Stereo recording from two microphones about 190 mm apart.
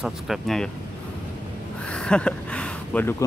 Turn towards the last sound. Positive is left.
turn(degrees=10)  # may be behind; listen again after turning